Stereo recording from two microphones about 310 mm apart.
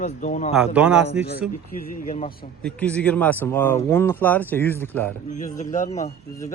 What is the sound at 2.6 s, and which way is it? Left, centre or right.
Speech, centre.